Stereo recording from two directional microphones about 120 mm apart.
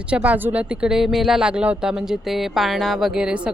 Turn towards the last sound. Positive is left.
turn(degrees=-10)  # may be behind; listen again after turning